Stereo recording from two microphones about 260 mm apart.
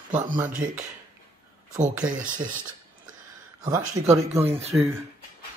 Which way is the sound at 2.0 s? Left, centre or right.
Right.